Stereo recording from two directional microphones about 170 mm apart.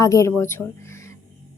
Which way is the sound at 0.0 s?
20° left (ahead or behind).